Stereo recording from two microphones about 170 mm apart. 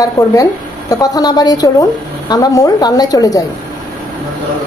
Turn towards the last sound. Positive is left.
turn(degrees=20)  # may be behind; listen again after turning